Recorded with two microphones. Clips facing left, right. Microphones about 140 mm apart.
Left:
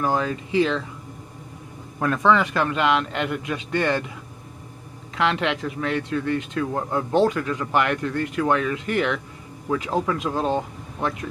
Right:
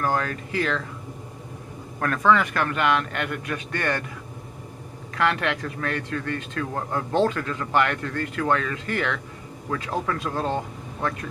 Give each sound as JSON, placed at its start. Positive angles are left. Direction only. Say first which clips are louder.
{"t": 0.0, "sound": "a man's voice", "louder": "left 2 dB", "side_deg": 15}
{"t": 2.0, "sound": "a man's voice", "louder": "left 1 dB", "side_deg": 15}
{"t": 5.1, "sound": "a man's voice", "louder": "left 1 dB", "side_deg": 20}